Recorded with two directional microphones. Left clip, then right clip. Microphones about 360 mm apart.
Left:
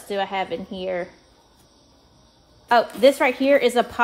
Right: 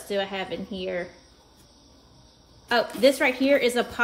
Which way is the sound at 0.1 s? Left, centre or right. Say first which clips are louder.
Left 4 dB; left.